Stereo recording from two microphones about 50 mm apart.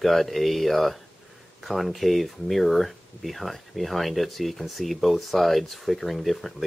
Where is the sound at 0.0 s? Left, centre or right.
Centre.